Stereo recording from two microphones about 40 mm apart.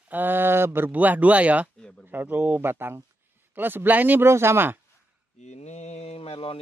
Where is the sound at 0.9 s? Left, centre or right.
Right.